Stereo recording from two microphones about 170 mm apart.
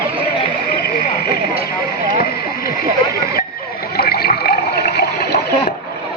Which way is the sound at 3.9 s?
70° left (ahead or behind).